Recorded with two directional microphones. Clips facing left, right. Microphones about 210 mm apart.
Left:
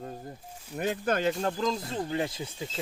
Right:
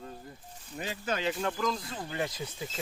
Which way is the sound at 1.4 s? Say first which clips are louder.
Left 3 dB; 30° left (ahead or behind).